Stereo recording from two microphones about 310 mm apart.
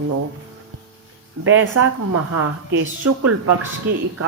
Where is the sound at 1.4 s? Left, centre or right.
Right.